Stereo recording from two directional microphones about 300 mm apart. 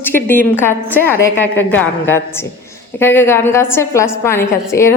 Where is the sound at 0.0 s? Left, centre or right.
Centre.